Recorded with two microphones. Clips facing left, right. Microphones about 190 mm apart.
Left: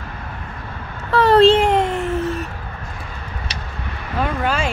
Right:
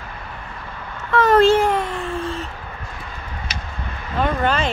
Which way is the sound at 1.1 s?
30° left (ahead or behind).